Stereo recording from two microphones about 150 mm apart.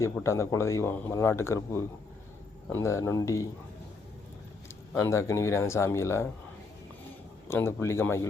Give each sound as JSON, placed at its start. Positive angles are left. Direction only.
{"t": 0.0, "sound": "speech", "side_deg": 20}
{"t": 4.9, "sound": "speech", "side_deg": 20}
{"t": 7.4, "sound": "speech", "side_deg": 15}